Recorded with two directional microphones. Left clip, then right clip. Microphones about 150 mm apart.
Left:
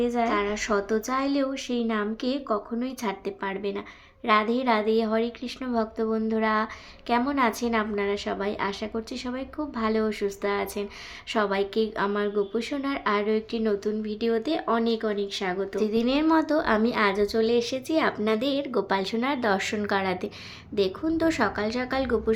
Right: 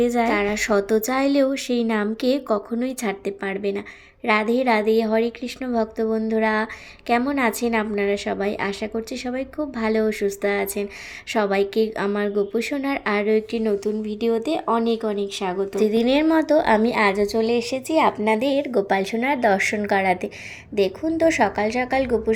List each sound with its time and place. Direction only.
0.0 s a woman's voice: 35° right (ahead or behind); by 15.8 s 15° right (ahead or behind)
15.8 s a woman's voice: 25° right (ahead or behind)